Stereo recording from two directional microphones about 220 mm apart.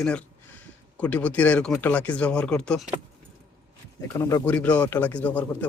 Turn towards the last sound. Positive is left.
turn(degrees=5)  # may be behind; listen again after turning